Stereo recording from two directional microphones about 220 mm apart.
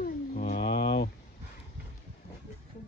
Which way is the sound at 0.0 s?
40° left (ahead or behind).